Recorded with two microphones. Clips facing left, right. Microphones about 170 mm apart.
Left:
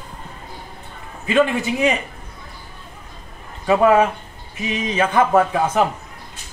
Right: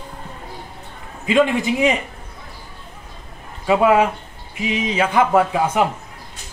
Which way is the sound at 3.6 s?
10° right (ahead or behind).